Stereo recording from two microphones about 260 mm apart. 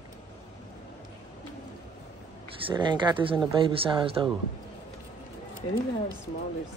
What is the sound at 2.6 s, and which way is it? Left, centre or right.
Speech, centre.